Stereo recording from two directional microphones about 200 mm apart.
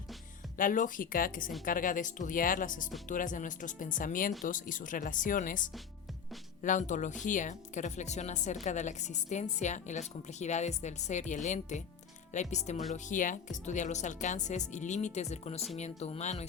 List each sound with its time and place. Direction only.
0.5 s a woman's voice: 40° left (ahead or behind)